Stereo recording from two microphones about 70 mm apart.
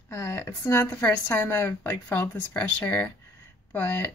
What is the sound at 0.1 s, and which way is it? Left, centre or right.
Speech, left.